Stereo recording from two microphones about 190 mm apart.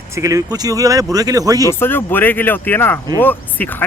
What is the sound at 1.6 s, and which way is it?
Speech, 10° left (ahead or behind).